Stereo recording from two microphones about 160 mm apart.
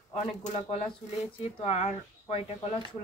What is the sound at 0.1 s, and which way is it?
Speech, 40° left (ahead or behind).